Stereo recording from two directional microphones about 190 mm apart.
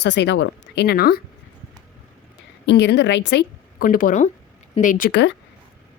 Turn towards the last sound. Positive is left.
turn(degrees=45)  # may be behind; listen again after turning